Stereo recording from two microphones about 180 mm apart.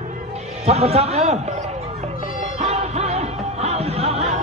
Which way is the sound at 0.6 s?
35° right (ahead or behind).